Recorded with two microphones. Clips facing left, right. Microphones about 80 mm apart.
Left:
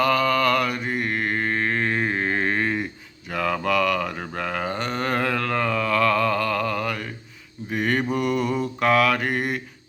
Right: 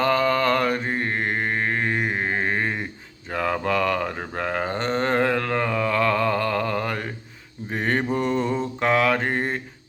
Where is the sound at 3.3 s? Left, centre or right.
Right.